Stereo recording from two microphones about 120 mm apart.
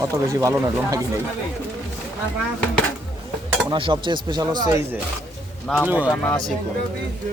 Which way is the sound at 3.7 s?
45° right (ahead or behind).